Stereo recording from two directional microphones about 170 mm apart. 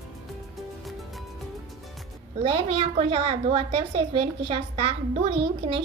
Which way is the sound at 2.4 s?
35° right (ahead or behind).